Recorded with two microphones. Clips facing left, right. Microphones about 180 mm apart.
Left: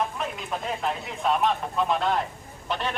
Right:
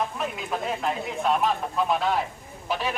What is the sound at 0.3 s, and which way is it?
A man's voice, centre (ahead or behind).